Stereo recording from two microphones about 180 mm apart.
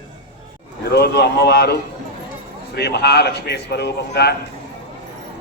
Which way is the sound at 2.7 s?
65° left (ahead or behind).